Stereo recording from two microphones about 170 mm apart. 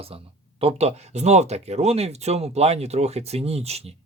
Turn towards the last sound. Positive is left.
turn(degrees=-40)  # may be behind; listen again after turning